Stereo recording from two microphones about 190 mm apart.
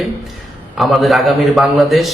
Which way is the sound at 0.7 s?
Centre (ahead or behind).